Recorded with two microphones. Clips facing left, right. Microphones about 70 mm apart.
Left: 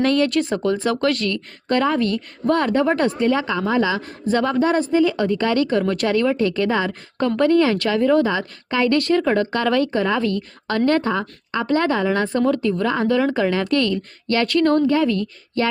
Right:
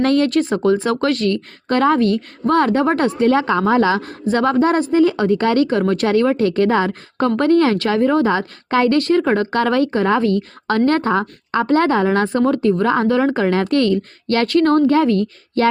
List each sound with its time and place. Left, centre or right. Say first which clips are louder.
0.0 s speech: right 3 dB; right